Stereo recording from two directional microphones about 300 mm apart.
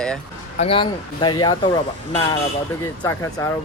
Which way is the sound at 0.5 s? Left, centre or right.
Centre.